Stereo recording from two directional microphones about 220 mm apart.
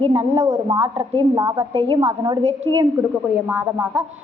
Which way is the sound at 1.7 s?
25° right (ahead or behind).